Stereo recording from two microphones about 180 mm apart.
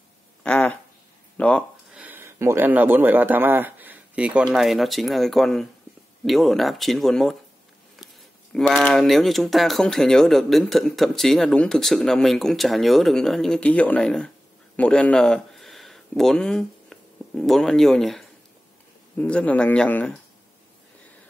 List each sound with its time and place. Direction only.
0.4 s a sound: 5° left (ahead or behind)
2.0 s speech: 10° right (ahead or behind)
8.5 s speech: centre (ahead or behind)